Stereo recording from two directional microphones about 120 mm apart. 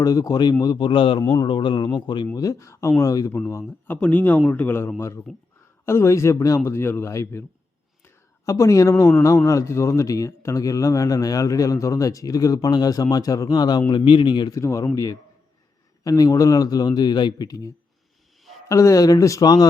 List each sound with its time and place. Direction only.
0.0 s a man's voice: 30° left (ahead or behind)
2.3 s speech: 30° left (ahead or behind)
3.8 s a man's voice: 10° left (ahead or behind)
8.0 s a sound: 25° left (ahead or behind)
9.5 s speech: 25° left (ahead or behind)
14.6 s a man's voice: 25° left (ahead or behind)
18.7 s speech: 25° left (ahead or behind)